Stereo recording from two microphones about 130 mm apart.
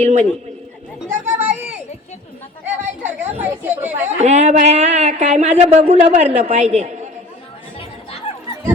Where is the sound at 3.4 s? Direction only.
15° right (ahead or behind).